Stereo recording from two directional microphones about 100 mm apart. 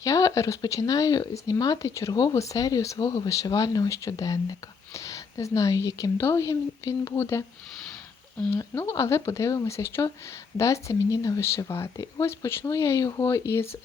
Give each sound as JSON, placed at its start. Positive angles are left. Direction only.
{"t": 0.0, "sound": "speech", "side_deg": 35}
{"t": 8.4, "sound": "speech", "side_deg": 25}